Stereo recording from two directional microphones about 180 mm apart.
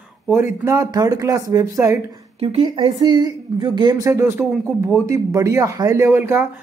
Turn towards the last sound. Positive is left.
turn(degrees=-10)  # may be behind; listen again after turning